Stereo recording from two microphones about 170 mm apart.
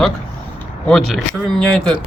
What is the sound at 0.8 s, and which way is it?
Speech, 5° left (ahead or behind).